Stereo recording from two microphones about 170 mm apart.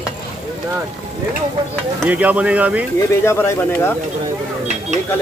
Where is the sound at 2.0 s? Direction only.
10° right (ahead or behind).